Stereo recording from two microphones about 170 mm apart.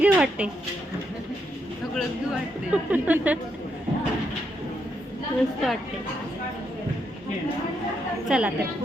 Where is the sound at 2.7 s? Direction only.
10° right (ahead or behind).